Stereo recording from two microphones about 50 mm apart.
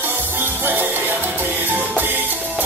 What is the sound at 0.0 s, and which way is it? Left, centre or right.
Salsa music, right.